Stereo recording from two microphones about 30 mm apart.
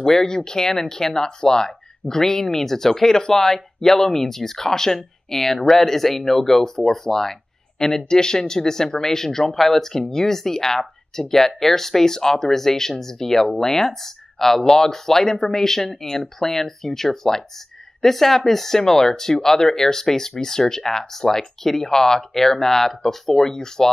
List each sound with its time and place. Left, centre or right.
0.0 s speech: centre